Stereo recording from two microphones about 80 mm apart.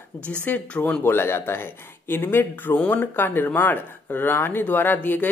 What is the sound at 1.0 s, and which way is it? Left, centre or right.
Speech, left.